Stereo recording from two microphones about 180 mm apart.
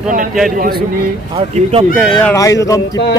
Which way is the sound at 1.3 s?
35° right (ahead or behind).